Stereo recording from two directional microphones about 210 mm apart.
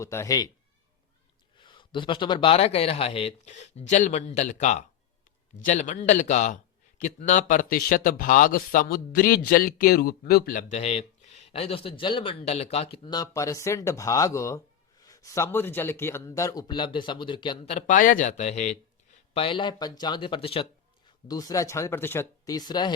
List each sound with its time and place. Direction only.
0.0 s speech: 15° left (ahead or behind)
1.5 s a man's voice: 25° left (ahead or behind)